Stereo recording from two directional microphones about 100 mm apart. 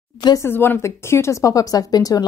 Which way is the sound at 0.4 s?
25° left (ahead or behind).